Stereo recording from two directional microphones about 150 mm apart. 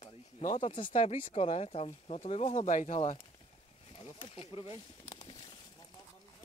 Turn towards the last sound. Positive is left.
turn(degrees=30)  # may be behind; listen again after turning